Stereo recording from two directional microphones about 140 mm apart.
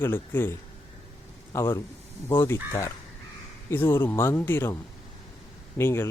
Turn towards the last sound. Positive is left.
turn(degrees=15)  # may be behind; listen again after turning